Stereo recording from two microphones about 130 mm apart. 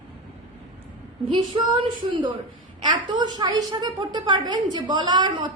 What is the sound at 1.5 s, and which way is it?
A woman's voice, 40° right (ahead or behind).